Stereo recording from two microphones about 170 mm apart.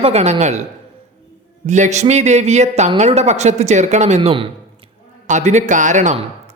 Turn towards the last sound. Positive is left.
turn(degrees=-45)  # may be behind; listen again after turning